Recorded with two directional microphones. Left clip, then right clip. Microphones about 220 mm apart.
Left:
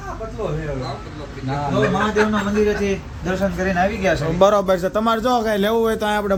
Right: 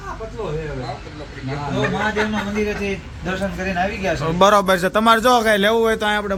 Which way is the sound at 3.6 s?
10° left (ahead or behind).